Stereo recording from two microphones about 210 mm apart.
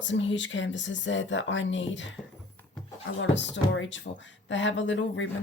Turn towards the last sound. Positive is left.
turn(degrees=60)  # may be behind; listen again after turning